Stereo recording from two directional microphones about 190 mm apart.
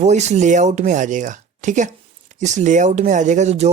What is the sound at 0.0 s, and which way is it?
Speech, 35° right (ahead or behind).